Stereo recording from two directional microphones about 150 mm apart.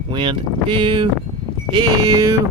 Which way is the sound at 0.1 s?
35° right (ahead or behind).